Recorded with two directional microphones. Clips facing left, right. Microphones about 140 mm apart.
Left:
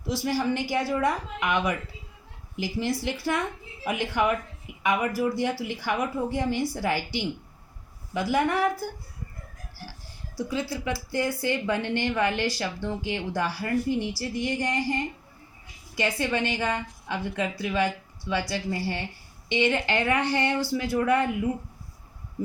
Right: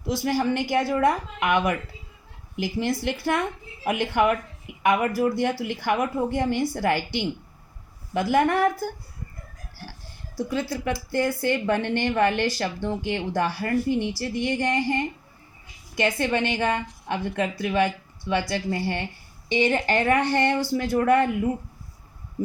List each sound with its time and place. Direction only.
0.1 s a woman's voice: 55° right (ahead or behind)
10.3 s a woman's voice: 55° right (ahead or behind)
19.5 s a woman's voice: 40° right (ahead or behind)